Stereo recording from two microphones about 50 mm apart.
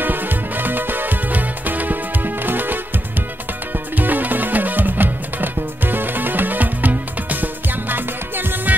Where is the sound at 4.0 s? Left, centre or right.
Right.